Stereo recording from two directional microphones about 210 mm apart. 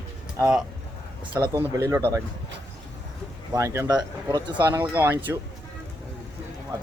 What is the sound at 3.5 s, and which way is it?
Speech, 15° right (ahead or behind).